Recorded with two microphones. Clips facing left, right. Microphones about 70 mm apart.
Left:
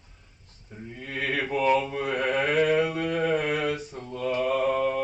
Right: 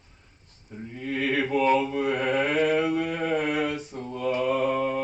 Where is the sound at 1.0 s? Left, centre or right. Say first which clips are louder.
Right 3 dB; centre.